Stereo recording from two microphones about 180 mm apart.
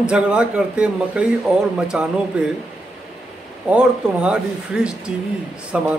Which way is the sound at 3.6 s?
5° right (ahead or behind).